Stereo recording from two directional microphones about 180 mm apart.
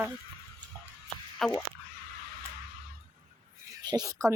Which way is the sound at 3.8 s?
25° right (ahead or behind).